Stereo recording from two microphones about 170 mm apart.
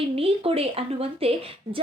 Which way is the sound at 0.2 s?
35° right (ahead or behind).